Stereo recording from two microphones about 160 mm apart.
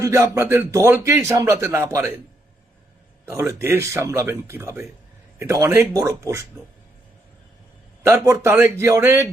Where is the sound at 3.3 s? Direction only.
15° right (ahead or behind).